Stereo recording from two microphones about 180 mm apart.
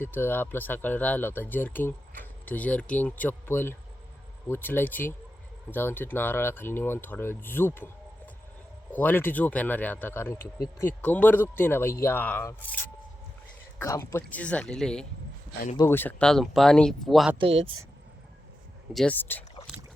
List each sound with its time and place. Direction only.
0.0 s speech: 10° left (ahead or behind)
8.9 s speech: 10° left (ahead or behind)
17.3 s speech: 35° right (ahead or behind)
18.9 s speech: 10° left (ahead or behind)